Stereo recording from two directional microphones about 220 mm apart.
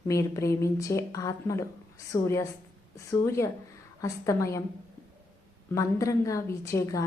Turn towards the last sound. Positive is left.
turn(degrees=15)  # may be behind; listen again after turning